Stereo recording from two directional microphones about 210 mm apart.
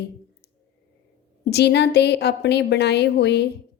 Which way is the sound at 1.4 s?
50° left (ahead or behind).